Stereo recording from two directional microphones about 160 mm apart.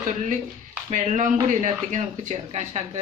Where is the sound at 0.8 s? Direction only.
50° right (ahead or behind).